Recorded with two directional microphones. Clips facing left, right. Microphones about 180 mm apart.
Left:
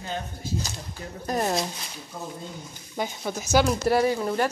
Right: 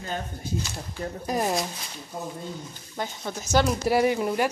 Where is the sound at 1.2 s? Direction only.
5° right (ahead or behind).